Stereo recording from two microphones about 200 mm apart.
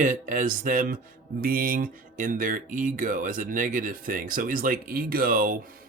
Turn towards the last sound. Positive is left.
turn(degrees=-45)  # may be behind; listen again after turning